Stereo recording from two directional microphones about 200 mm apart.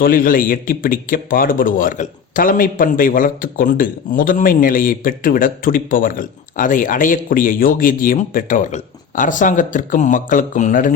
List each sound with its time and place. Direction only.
0.0 s speech: 45° left (ahead or behind)